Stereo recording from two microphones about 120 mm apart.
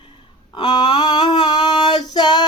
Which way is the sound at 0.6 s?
40° left (ahead or behind).